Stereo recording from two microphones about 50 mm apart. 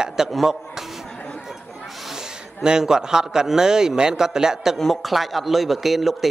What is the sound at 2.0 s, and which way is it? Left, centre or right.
A man's voice, centre.